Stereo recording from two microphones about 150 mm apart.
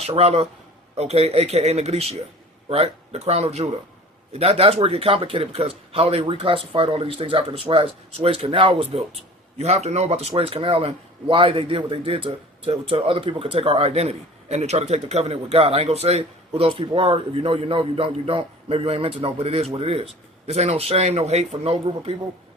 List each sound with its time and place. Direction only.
0.0 s speech: 45° right (ahead or behind)